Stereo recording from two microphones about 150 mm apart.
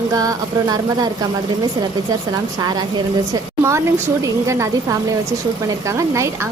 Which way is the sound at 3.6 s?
20° right (ahead or behind).